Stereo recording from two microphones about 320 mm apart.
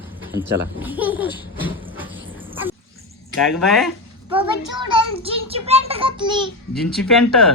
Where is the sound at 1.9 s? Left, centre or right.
Centre.